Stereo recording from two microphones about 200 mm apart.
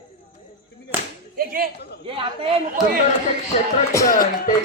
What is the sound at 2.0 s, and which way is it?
Speech, 25° right (ahead or behind).